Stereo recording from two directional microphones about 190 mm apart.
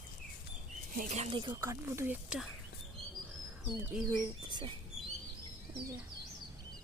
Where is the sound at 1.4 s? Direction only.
20° right (ahead or behind).